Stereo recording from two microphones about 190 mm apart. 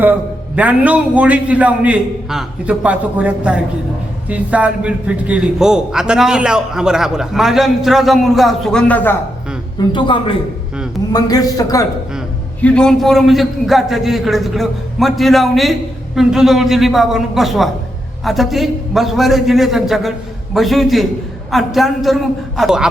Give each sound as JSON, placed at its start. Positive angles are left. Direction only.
{"t": 0.0, "sound": "a man's voice", "side_deg": -10}
{"t": 9.7, "sound": "a man's voice", "side_deg": 25}
{"t": 12.6, "sound": "a man's voice", "side_deg": 5}